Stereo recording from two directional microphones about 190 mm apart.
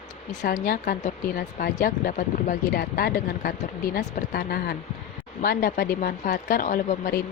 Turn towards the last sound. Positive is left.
turn(degrees=50)  # may be behind; listen again after turning